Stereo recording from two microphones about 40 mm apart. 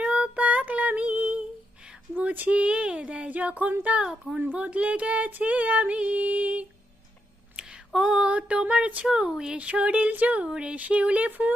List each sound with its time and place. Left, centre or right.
0.0 s child singing: right
2.1 s a sound: right
3.2 s music: right
4.5 s female singing: right
7.5 s a sound: centre; by 9.0 s right
9.0 s speech: centre
9.6 s female singing: right
9.9 s female singing: right
10.4 s female singing: right
11.3 s speech: right